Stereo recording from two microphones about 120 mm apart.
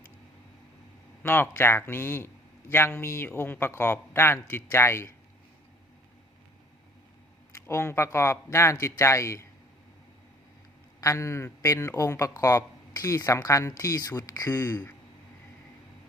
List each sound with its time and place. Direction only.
1.2 s a man's voice: 20° left (ahead or behind)
7.7 s a man's voice: 20° left (ahead or behind)
11.0 s a man's voice: 25° left (ahead or behind)